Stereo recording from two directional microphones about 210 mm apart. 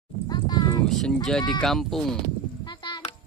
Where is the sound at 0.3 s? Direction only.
20° left (ahead or behind).